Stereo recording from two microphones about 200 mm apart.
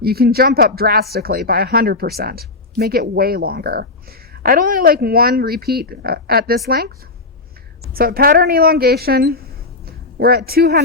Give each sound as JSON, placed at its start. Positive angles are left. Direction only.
{"t": 0.0, "sound": "speech", "side_deg": -50}
{"t": 7.9, "sound": "speech", "side_deg": -50}